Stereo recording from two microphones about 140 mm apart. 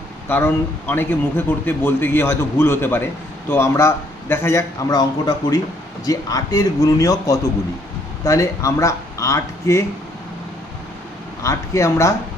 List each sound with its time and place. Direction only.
0.3 s a man's voice: 15° left (ahead or behind)
11.4 s a man's voice: 20° left (ahead or behind)